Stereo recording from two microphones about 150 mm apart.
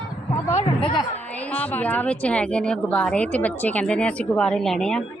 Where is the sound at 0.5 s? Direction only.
35° left (ahead or behind).